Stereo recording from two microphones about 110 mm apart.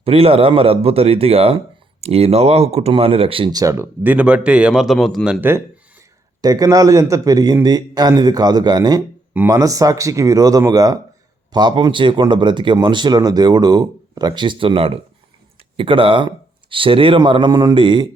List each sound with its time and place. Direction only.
0.0 s speech: 60° right (ahead or behind)
3.5 s a man's voice: 30° right (ahead or behind)
4.0 s a man's voice: 15° right (ahead or behind)
5.4 s speech: 20° right (ahead or behind)
6.4 s a man's voice: 35° right (ahead or behind)